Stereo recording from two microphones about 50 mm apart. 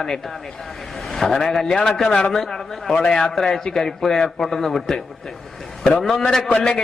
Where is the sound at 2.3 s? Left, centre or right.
Centre.